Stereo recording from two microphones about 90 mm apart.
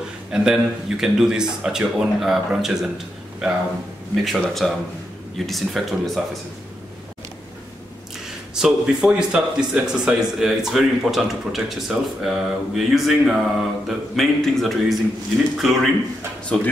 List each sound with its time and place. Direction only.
0.3 s speech: 5° right (ahead or behind)
8.5 s speech: 5° right (ahead or behind)
16.5 s speech: 15° left (ahead or behind)